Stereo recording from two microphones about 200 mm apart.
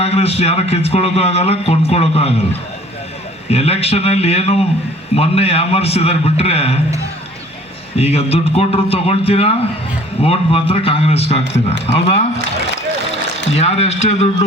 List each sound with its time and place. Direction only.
0.0 s a man's voice: 30° left (ahead or behind)
7.9 s a man's voice: 30° left (ahead or behind)